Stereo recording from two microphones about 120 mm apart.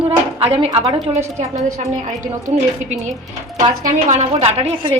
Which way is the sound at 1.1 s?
70° right (ahead or behind).